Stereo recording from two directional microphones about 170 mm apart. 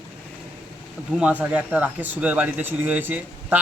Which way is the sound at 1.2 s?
10° right (ahead or behind).